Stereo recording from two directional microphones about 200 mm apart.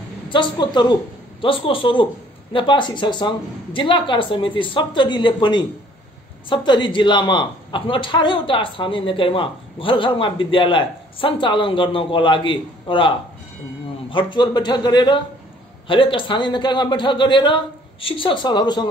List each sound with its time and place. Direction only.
0.3 s a man's voice: 25° left (ahead or behind)
14.1 s a man's voice: 20° left (ahead or behind)